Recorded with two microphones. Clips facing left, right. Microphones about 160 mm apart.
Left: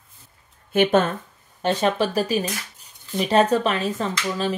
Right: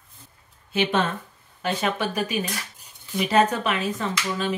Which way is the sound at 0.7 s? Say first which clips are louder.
Left 6 dB; 50° left (ahead or behind).